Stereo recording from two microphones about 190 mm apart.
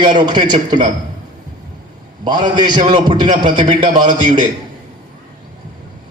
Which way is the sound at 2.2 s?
25° right (ahead or behind).